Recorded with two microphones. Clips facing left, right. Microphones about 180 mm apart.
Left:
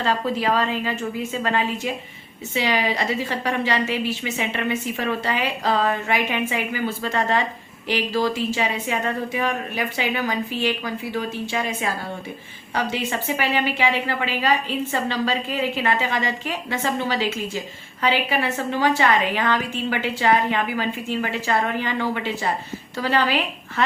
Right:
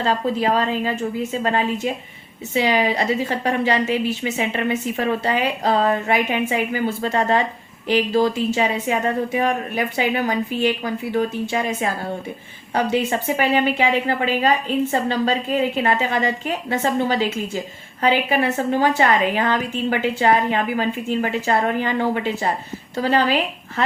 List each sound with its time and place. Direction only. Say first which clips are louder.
0.0 s a woman's voice: right 2 dB; 35° right (ahead or behind)